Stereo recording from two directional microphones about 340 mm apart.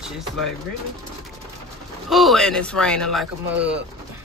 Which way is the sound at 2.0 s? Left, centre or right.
Centre.